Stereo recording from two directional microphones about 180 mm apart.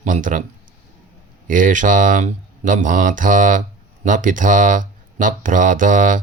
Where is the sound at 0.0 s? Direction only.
45° right (ahead or behind).